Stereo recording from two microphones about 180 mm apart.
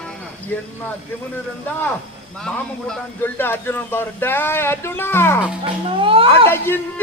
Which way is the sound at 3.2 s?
10° left (ahead or behind).